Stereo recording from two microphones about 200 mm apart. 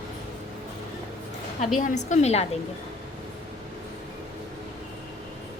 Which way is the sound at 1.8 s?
35° left (ahead or behind).